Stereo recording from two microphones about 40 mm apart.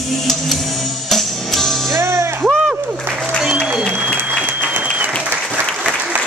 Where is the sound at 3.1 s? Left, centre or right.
Right.